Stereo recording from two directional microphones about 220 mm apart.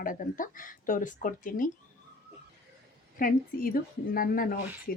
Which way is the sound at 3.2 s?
40° left (ahead or behind).